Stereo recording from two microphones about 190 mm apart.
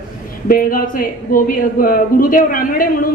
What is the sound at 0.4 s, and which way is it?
Speech, 50° left (ahead or behind).